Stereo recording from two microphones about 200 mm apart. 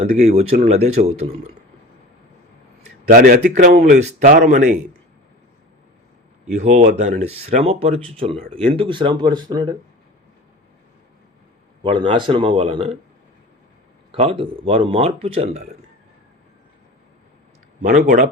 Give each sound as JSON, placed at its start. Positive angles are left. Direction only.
{"t": 0.0, "sound": "speech", "side_deg": -30}
{"t": 3.1, "sound": "speech", "side_deg": -45}
{"t": 3.9, "sound": "speech", "side_deg": -35}
{"t": 6.6, "sound": "speech", "side_deg": -35}
{"t": 11.8, "sound": "speech", "side_deg": -25}
{"t": 14.1, "sound": "speech", "side_deg": -30}
{"t": 17.8, "sound": "speech", "side_deg": -40}